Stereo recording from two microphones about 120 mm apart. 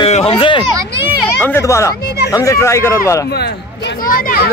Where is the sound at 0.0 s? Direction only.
50° left (ahead or behind).